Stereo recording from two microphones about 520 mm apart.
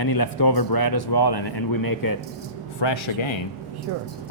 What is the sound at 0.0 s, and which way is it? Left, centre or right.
Speech, left.